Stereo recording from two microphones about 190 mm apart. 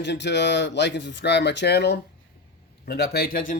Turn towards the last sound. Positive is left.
turn(degrees=50)  # may be behind; listen again after turning